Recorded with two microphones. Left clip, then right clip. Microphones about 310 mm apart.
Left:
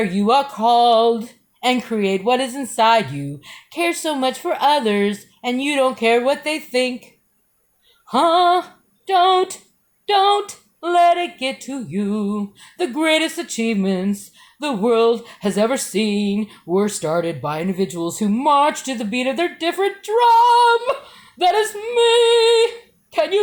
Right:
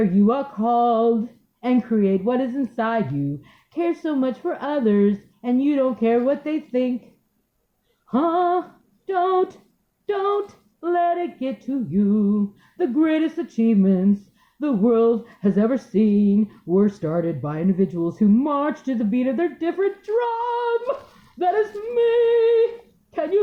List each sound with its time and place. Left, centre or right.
0.0 s speech: centre
8.1 s speech: centre